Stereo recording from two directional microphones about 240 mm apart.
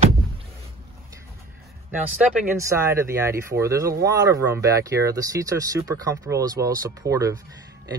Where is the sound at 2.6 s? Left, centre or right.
Centre.